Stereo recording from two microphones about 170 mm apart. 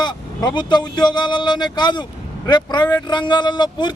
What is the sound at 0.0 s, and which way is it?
Speech, 25° left (ahead or behind).